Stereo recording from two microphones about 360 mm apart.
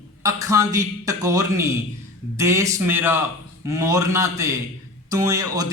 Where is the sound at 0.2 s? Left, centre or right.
Centre.